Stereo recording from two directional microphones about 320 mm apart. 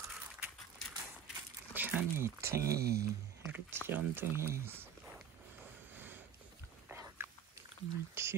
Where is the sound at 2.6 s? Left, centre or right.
Right.